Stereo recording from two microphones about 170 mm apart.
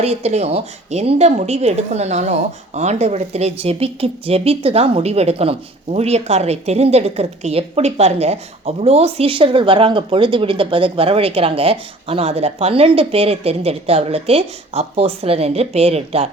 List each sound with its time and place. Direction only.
0.0 s a woman's voice: 40° right (ahead or behind)